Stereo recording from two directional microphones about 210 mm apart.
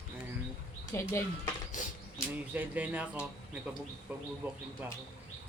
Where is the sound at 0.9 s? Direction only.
15° left (ahead or behind).